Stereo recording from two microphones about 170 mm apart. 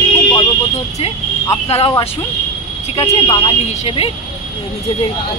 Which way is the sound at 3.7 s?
35° left (ahead or behind).